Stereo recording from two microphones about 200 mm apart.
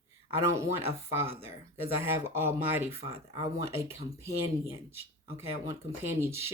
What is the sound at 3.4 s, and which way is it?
Speech, 15° right (ahead or behind).